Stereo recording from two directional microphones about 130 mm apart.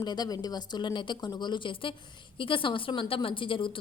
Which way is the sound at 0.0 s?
30° left (ahead or behind).